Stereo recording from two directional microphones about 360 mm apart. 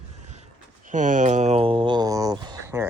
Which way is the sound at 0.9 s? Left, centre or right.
Right.